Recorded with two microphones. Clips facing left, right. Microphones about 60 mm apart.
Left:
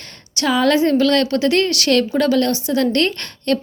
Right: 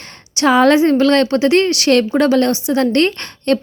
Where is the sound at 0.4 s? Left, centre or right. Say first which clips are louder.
Right 5 dB; right.